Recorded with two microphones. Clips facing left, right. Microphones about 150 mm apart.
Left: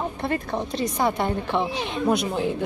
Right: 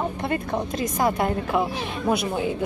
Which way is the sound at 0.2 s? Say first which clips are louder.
Right 1 dB; centre (ahead or behind).